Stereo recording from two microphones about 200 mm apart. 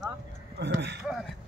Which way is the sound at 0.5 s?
60° right (ahead or behind).